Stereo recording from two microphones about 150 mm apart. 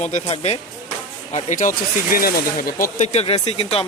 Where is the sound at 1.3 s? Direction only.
55° left (ahead or behind); by 2.8 s 75° left (ahead or behind).